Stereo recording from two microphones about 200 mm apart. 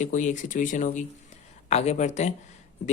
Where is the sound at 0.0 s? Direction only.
40° left (ahead or behind).